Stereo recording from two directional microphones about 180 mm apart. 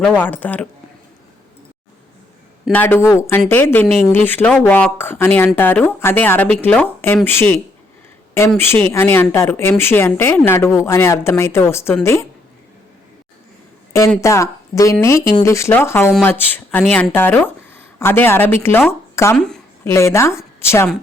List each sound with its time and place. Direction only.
0.0 s speech: 10° left (ahead or behind)
2.7 s speech: 10° left (ahead or behind)
14.2 s speech: 15° left (ahead or behind)